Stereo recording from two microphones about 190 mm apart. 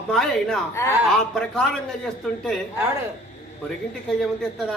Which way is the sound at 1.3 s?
5° left (ahead or behind).